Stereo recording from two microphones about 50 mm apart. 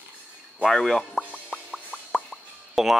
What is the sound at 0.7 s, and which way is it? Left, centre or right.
Speech, centre.